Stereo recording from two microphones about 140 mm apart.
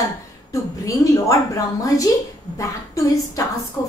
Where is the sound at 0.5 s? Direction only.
25° left (ahead or behind).